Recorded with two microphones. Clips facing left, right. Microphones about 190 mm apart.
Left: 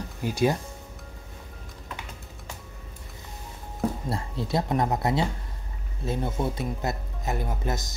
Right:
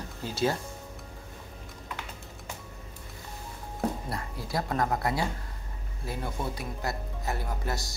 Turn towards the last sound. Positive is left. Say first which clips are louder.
# left 3 dB
turn(degrees=20)  # may be behind; listen again after turning